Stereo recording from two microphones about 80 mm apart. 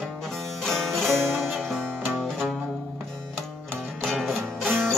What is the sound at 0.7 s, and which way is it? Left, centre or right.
Music, centre.